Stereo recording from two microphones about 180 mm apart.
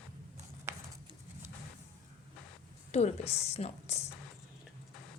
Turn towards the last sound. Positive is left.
turn(degrees=35)  # may be behind; listen again after turning